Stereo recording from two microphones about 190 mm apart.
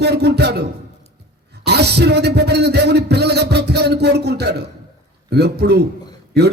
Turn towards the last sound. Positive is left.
turn(degrees=-60)  # may be behind; listen again after turning